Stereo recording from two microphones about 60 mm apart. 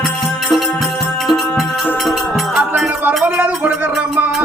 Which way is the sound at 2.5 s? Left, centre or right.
Centre.